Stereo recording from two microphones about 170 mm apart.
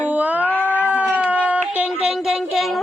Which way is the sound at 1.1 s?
10° right (ahead or behind).